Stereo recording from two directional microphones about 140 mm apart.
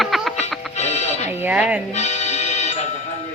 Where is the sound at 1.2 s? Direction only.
10° right (ahead or behind).